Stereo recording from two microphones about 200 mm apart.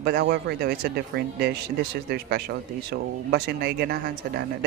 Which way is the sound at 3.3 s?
55° right (ahead or behind).